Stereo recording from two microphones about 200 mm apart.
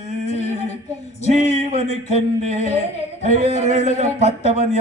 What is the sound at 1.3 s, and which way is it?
Speech, 30° right (ahead or behind).